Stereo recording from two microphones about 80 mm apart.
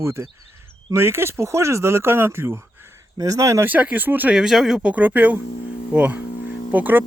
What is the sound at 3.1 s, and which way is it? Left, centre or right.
Speech, right.